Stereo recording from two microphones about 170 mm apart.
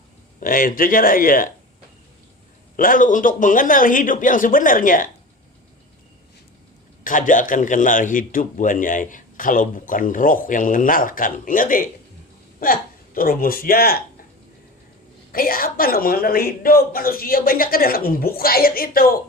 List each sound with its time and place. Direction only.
0.3 s a woman's voice: 55° left (ahead or behind)
2.7 s a man's voice: 55° left (ahead or behind)
7.0 s a man's voice: 50° left (ahead or behind)
15.3 s a woman's voice: 60° left (ahead or behind)